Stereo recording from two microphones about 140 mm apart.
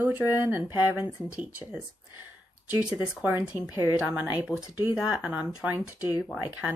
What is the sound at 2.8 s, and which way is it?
Speech, 10° right (ahead or behind).